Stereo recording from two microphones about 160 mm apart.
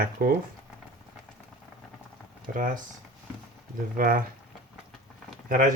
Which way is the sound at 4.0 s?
60° right (ahead or behind).